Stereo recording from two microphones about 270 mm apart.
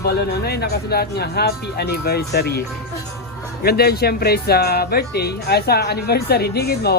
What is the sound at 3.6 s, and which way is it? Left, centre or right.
Speech, left.